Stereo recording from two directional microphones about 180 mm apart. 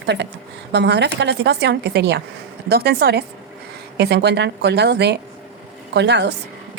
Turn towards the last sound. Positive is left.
turn(degrees=-70)  # may be behind; listen again after turning